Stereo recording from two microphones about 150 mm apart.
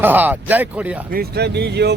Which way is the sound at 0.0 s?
10° right (ahead or behind).